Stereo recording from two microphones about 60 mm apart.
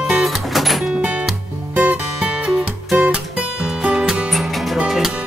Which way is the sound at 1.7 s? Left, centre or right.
Right.